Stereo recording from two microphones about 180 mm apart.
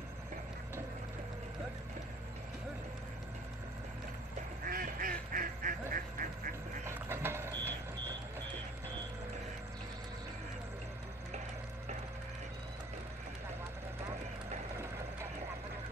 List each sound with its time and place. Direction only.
4.6 s quack: 55° right (ahead or behind)
5.3 s duck: 50° right (ahead or behind)
6.9 s a sound: 15° right (ahead or behind)